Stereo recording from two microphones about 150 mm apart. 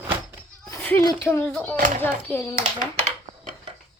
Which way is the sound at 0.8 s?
10° left (ahead or behind).